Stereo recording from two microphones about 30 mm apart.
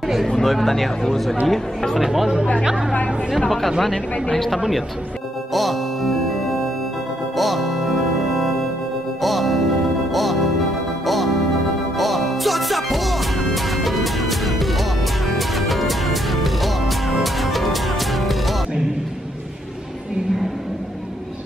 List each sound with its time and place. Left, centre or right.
0.0 s a sound: centre
0.4 s speech: centre
2.0 s speech: centre
5.5 s music: centre
7.3 s music: centre